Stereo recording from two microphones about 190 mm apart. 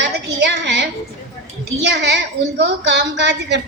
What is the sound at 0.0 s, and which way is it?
A woman's voice, 65° right (ahead or behind).